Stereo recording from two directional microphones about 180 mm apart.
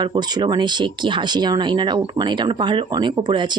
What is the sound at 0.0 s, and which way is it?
Speech, 25° right (ahead or behind).